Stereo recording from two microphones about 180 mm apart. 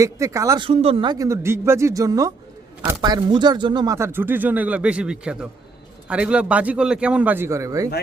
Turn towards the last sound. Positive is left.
turn(degrees=-15)  # may be behind; listen again after turning